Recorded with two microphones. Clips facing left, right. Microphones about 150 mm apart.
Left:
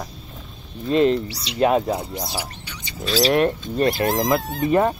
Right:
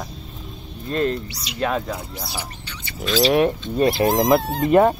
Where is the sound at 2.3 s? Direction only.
10° left (ahead or behind).